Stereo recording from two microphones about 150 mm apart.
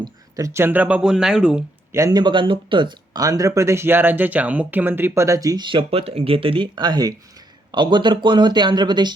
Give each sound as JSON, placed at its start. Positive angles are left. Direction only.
{"t": 0.0, "sound": "speech", "side_deg": -20}
{"t": 1.9, "sound": "speech", "side_deg": -20}